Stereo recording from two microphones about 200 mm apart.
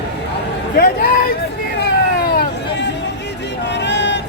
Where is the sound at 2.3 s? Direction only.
50° left (ahead or behind).